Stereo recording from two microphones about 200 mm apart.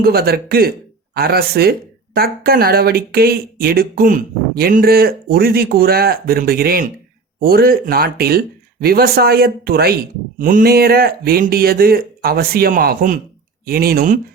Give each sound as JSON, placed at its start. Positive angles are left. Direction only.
{"t": 0.0, "sound": "speech", "side_deg": -50}